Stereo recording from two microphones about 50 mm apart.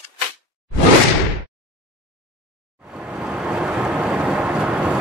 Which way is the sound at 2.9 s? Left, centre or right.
Centre.